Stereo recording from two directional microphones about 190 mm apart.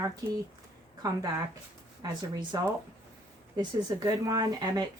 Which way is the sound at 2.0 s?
20° right (ahead or behind).